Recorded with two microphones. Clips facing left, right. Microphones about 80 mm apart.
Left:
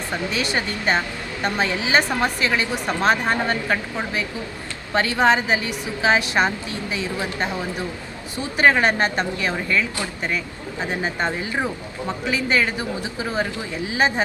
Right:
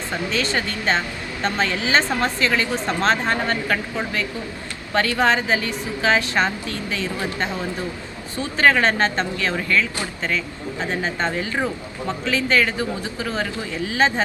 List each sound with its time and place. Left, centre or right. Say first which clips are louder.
0.1 s a woman's voice: right 1 dB; centre